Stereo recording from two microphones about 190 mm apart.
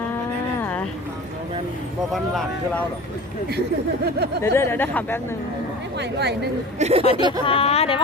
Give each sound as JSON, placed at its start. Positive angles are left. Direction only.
{"t": 0.6, "sound": "a sound", "side_deg": 10}
{"t": 4.4, "sound": "speech", "side_deg": 15}
{"t": 6.0, "sound": "a woman's voice", "side_deg": -60}
{"t": 6.7, "sound": "speech", "side_deg": -35}
{"t": 7.1, "sound": "speech", "side_deg": -25}
{"t": 7.4, "sound": "speech", "side_deg": 30}